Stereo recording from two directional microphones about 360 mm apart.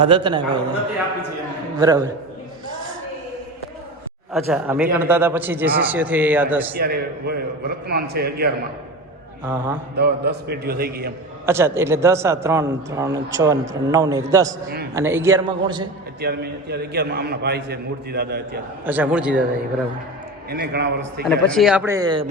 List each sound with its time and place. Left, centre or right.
0.0 s a man's voice: centre
1.8 s a man's voice: centre
4.3 s a man's voice: centre
6.7 s a man's voice: right
9.4 s a man's voice: centre
9.9 s a man's voice: right
11.4 s a man's voice: centre
16.2 s a man's voice: right
18.9 s a man's voice: centre
20.5 s a man's voice: right
21.2 s a man's voice: centre